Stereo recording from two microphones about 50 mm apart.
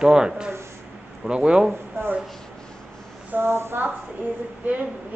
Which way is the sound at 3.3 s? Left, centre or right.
Right.